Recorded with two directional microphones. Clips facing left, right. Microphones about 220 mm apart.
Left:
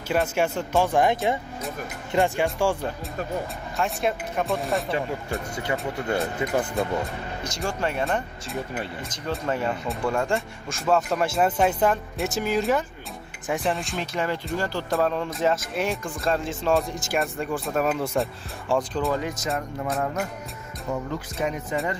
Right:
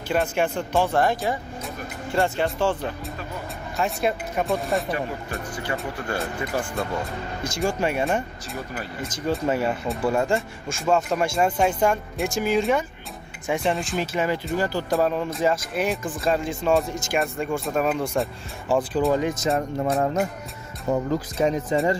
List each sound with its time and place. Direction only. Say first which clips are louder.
0.1 s speech: even; 5° left (ahead or behind)
0.9 s speech: left 1 dB; 20° left (ahead or behind)
3.7 s speech: right 2 dB; centre (ahead or behind)
5.6 s speech: left 1 dB; 20° left (ahead or behind)
7.4 s speech: right 4 dB; 10° right (ahead or behind)
19.4 s music: right 5 dB; 30° right (ahead or behind)
20.9 s speech: right 6 dB; 35° right (ahead or behind)